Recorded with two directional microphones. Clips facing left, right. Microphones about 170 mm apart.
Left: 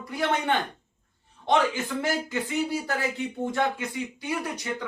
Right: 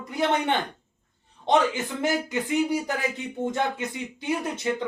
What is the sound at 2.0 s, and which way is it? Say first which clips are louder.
Speech: right 4 dB; 20° right (ahead or behind).